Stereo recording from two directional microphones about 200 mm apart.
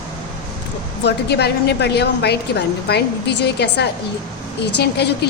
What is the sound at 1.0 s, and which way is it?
A woman's voice, 55° left (ahead or behind).